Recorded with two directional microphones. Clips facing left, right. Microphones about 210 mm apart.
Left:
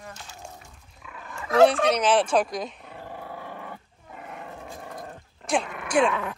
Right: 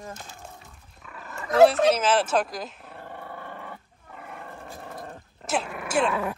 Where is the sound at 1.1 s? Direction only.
5° right (ahead or behind).